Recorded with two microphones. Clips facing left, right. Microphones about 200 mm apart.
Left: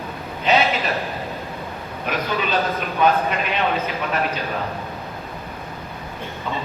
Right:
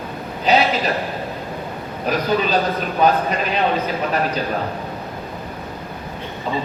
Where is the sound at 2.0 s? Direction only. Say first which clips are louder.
Right 5 dB; 35° right (ahead or behind).